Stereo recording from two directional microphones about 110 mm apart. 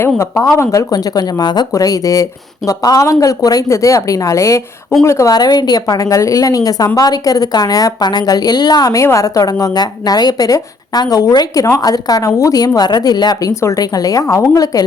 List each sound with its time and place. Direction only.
0.2 s a woman's voice: 25° left (ahead or behind)
13.5 s a woman's voice: 25° left (ahead or behind)